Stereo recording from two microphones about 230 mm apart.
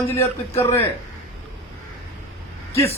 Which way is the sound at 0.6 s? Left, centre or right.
Centre.